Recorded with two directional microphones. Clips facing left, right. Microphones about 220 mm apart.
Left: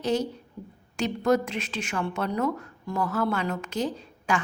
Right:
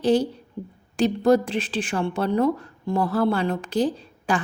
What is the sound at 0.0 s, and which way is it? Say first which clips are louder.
A woman's voice: right 6 dB; 30° right (ahead or behind).